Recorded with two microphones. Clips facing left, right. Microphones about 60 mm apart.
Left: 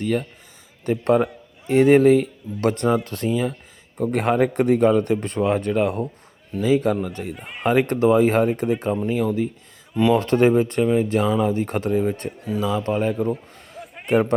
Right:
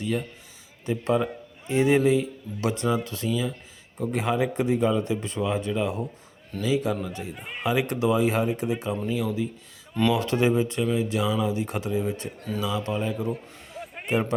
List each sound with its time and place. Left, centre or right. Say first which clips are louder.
0.0 s a man's voice: left 5 dB; left
6.6 s a man's voice: left 6 dB; left
7.3 s speech: left 1 dB; centre
7.6 s a man's voice: left 6 dB; left